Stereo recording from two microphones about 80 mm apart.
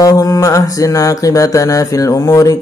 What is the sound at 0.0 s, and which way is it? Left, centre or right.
Mantra, left.